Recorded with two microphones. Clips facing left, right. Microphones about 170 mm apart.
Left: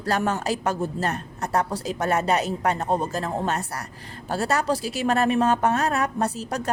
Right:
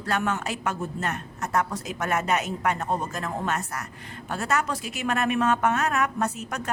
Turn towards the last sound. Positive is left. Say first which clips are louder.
# left 3 dB
turn(degrees=35)  # may be behind; listen again after turning